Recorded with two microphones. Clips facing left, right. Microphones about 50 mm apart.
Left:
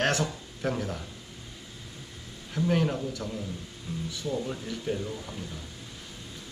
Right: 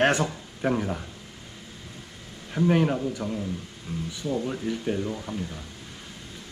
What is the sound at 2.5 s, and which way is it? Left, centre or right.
Speech, right.